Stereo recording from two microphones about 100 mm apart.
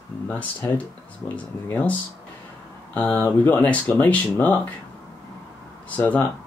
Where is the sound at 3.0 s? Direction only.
20° left (ahead or behind).